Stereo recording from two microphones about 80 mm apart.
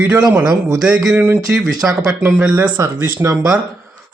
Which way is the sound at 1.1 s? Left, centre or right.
Right.